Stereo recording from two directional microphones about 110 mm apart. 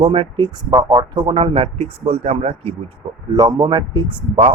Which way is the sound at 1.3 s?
60° right (ahead or behind).